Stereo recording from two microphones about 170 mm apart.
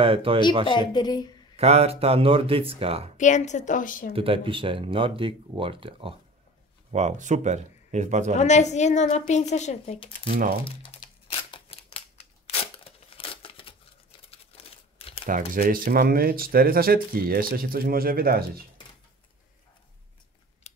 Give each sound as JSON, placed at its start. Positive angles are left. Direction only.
{"t": 0.0, "sound": "speech", "side_deg": -30}
{"t": 0.7, "sound": "a woman's voice", "side_deg": 25}
{"t": 1.6, "sound": "speech", "side_deg": -40}
{"t": 3.2, "sound": "speech", "side_deg": 45}
{"t": 4.1, "sound": "speech", "side_deg": -35}
{"t": 6.9, "sound": "speech", "side_deg": -45}
{"t": 8.4, "sound": "speech", "side_deg": 40}
{"t": 10.3, "sound": "speech", "side_deg": -60}
{"t": 10.6, "sound": "scissors", "side_deg": 30}
{"t": 15.0, "sound": "crumpling", "side_deg": 35}
{"t": 15.2, "sound": "speech", "side_deg": -50}
{"t": 20.7, "sound": "a sound", "side_deg": 40}